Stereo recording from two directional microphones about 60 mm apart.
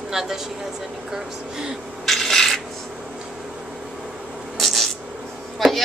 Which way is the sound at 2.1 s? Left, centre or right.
Centre.